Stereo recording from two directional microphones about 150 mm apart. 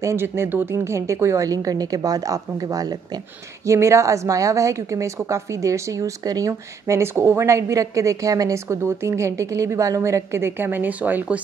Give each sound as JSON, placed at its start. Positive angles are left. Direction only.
{"t": 0.0, "sound": "speech", "side_deg": -15}